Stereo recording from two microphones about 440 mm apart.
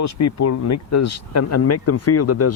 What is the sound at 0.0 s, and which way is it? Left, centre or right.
Speech, left.